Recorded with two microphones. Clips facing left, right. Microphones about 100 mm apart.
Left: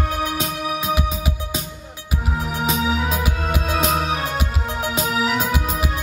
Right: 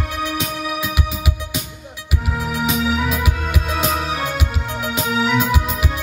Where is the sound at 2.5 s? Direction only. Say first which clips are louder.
Right 2 dB; 30° left (ahead or behind).